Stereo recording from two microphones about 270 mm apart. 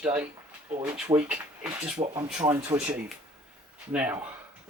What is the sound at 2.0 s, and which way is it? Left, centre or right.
Speech, right.